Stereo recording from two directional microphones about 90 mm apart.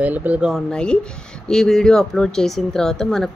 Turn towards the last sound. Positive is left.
turn(degrees=5)  # may be behind; listen again after turning